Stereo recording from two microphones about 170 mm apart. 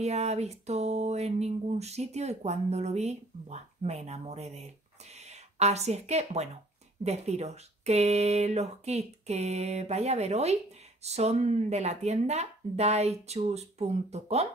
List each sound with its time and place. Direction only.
0.0 s speech: 40° right (ahead or behind)